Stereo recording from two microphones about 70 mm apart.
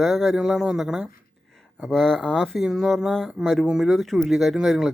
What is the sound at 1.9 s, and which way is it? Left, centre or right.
Speech, centre.